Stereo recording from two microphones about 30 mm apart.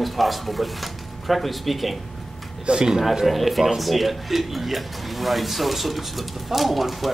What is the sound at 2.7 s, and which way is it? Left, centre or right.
Speech, right.